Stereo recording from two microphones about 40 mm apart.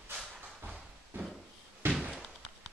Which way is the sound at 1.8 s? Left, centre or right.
Right.